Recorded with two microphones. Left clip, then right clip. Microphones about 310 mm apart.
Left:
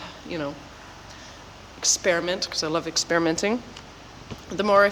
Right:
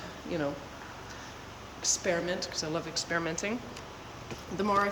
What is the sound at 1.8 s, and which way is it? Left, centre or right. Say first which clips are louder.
Speech: left 8 dB; centre.